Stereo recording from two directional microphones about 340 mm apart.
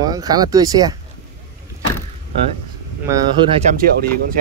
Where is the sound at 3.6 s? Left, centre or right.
Right.